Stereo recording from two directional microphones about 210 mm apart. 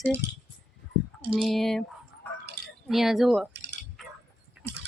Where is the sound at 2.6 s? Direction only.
50° right (ahead or behind).